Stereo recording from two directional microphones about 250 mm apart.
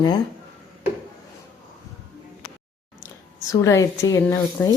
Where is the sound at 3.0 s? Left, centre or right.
Centre.